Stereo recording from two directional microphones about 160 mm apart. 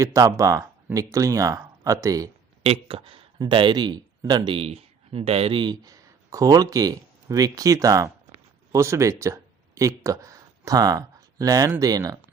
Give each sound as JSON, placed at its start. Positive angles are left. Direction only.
{"t": 0.0, "sound": "speech", "side_deg": -20}
{"t": 2.6, "sound": "speech", "side_deg": -35}